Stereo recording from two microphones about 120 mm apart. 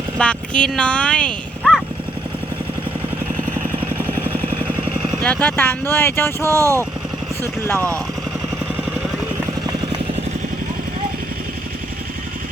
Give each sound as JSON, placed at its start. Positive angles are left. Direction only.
{"t": 0.2, "sound": "speech", "side_deg": 10}
{"t": 5.2, "sound": "speech", "side_deg": 10}
{"t": 5.9, "sound": "a sound", "side_deg": 20}
{"t": 6.4, "sound": "speech", "side_deg": -25}